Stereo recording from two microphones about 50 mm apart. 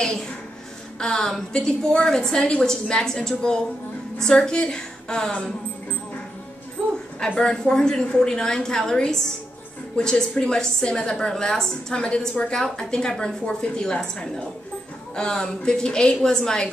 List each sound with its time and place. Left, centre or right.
0.0 s a woman's voice: centre
7.2 s a woman's voice: centre